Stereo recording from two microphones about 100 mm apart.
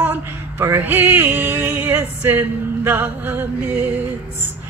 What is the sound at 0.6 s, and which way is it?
Music, 20° right (ahead or behind).